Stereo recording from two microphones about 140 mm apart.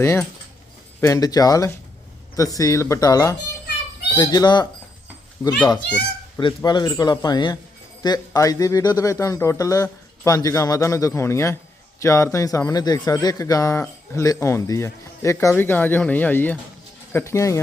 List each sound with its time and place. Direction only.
1.0 s speech: 25° left (ahead or behind)
5.4 s speech: 15° left (ahead or behind)
6.6 s a man's voice: 30° left (ahead or behind)